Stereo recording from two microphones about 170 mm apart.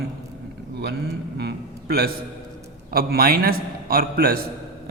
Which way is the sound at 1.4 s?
65° right (ahead or behind).